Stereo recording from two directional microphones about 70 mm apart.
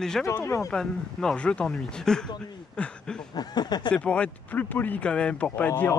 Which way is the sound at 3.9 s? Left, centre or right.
Centre.